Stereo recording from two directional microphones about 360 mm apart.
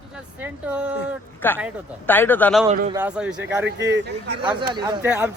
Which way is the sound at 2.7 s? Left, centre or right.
Centre.